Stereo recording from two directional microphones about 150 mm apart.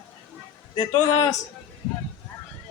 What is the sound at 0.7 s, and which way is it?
Speech, 30° left (ahead or behind).